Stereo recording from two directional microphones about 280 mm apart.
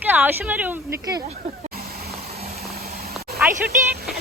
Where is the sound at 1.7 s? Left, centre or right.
Right.